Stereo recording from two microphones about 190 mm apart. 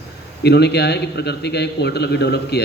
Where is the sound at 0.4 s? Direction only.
60° left (ahead or behind).